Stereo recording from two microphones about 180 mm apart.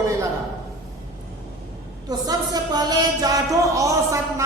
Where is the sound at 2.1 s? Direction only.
20° right (ahead or behind).